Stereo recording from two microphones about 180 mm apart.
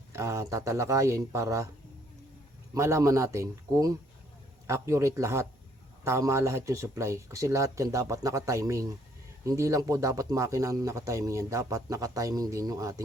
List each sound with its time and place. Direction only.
0.1 s speech: 15° right (ahead or behind)
2.7 s speech: 15° right (ahead or behind)